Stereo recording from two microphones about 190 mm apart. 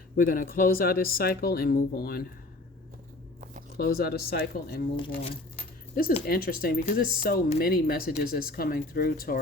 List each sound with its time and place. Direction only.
0.2 s speech: 50° left (ahead or behind)
3.8 s speech: 50° left (ahead or behind)
4.9 s speech: 25° left (ahead or behind)
6.2 s speech: 50° left (ahead or behind)